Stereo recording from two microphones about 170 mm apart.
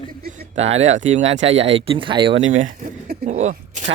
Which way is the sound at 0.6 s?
40° right (ahead or behind).